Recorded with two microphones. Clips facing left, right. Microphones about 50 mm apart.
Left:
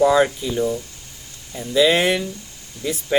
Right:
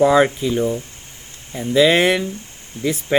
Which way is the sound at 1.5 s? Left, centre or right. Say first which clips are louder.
Right 2 dB; right.